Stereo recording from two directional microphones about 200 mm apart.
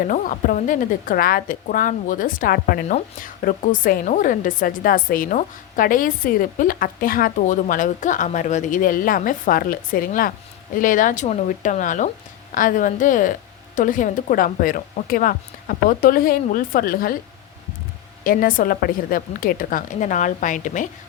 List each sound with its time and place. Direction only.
0.1 s a woman's voice: 40° left (ahead or behind)
18.2 s a woman's voice: 45° left (ahead or behind)